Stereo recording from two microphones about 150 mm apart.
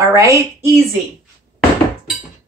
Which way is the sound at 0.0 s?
20° right (ahead or behind).